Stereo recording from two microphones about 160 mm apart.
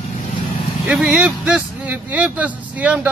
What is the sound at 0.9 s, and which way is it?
Speech, 5° right (ahead or behind).